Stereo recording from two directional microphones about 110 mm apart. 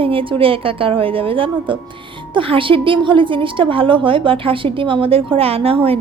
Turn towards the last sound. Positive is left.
turn(degrees=-60)  # may be behind; listen again after turning